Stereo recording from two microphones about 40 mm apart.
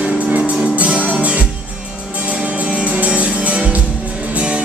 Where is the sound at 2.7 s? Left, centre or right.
Right.